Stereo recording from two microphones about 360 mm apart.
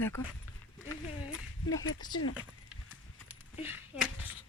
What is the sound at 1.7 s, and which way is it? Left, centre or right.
Speech, left.